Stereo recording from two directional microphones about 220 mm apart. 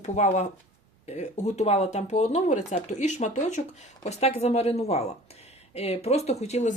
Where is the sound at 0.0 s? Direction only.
30° left (ahead or behind).